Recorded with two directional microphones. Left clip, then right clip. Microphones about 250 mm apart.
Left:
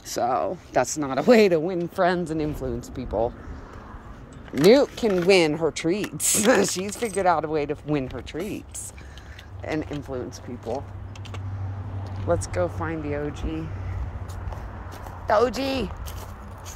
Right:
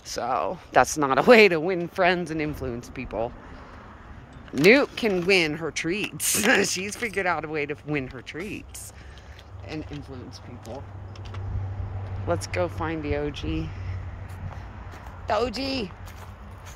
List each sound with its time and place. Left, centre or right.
0.1 s speech: centre
0.7 s speech: centre
4.5 s speech: centre
10.7 s speech: left
12.3 s speech: centre
15.2 s speech: centre